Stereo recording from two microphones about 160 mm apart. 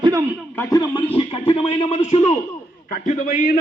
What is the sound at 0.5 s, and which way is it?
Speech, 20° left (ahead or behind).